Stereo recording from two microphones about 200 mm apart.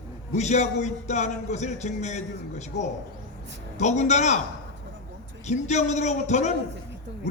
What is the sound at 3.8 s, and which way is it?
Speech, 35° left (ahead or behind).